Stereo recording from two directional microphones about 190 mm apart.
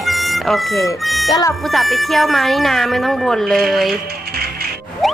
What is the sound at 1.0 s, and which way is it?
Music, centre (ahead or behind).